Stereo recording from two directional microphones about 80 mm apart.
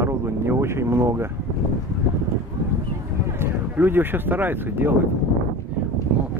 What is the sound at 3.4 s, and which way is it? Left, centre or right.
Speech, right.